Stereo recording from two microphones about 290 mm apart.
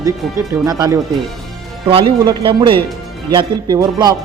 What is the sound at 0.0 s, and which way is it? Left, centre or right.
Speech, centre.